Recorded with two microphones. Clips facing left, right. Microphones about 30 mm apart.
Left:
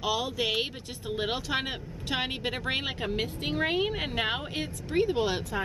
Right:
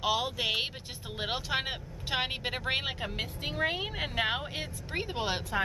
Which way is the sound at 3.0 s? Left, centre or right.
Centre.